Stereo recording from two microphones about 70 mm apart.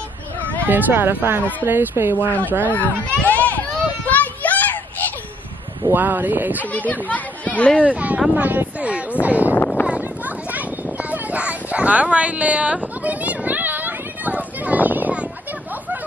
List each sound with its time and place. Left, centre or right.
0.7 s speech: right
2.1 s speech: left
2.7 s children playing: left
5.9 s speech: right
6.7 s speech: left
7.8 s speech: right
9.8 s a sound: right